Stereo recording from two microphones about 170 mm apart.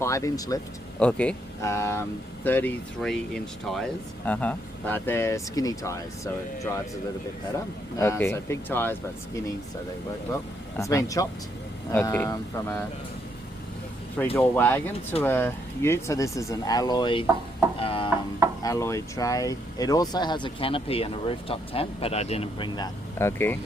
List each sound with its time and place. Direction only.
0.0 s speech: 20° left (ahead or behind)
0.9 s speech: 5° left (ahead or behind)
7.9 s speech: 15° left (ahead or behind)
10.8 s speech: 20° left (ahead or behind)
14.3 s speech: 10° left (ahead or behind); by 17.2 s 30° left (ahead or behind)
17.7 s music: 35° left (ahead or behind)
18.6 s speech: 20° left (ahead or behind)
23.1 s speech: 15° left (ahead or behind)